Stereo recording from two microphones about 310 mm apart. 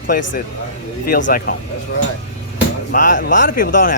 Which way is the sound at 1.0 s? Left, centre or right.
Left.